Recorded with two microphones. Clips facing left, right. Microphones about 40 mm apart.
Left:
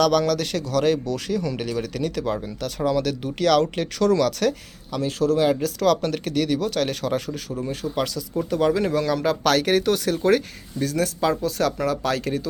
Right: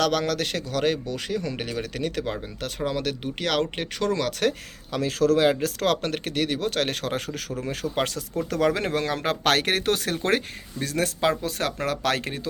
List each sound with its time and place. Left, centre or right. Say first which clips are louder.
0.0 s speech: left 4 dB; right
4.9 s a man's voice: even; right
5.5 s speech: left 3 dB; right
7.6 s a man's voice: left 3 dB; right
7.9 s speech: left 1 dB; right
8.4 s speech: left 3 dB; right